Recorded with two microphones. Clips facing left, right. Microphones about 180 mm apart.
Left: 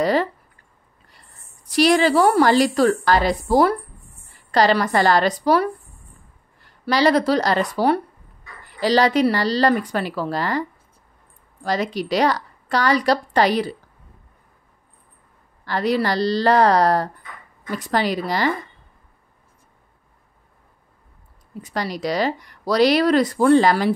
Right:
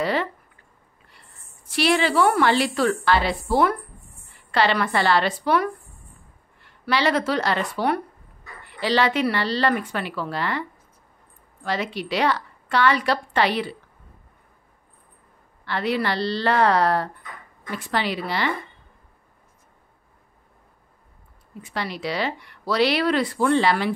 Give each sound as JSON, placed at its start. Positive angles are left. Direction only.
{"t": 0.0, "sound": "a sound", "side_deg": 40}
{"t": 1.7, "sound": "speech", "side_deg": 40}
{"t": 15.6, "sound": "speech", "side_deg": 40}
{"t": 21.5, "sound": "speech", "side_deg": 40}